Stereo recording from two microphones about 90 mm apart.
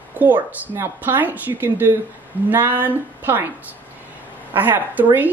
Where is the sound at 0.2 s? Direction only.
25° right (ahead or behind).